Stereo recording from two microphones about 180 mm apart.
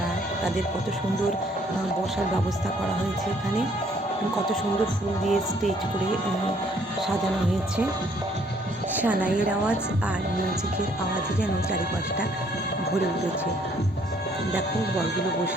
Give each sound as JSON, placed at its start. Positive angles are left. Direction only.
{"t": 5.2, "sound": "music", "side_deg": 0}
{"t": 9.0, "sound": "a woman's voice", "side_deg": -10}